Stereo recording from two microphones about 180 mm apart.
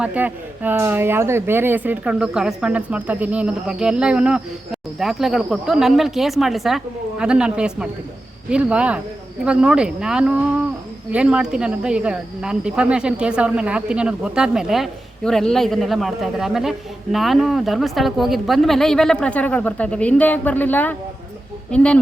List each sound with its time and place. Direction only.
0.0 s speech: 10° right (ahead or behind); by 20.9 s 10° left (ahead or behind)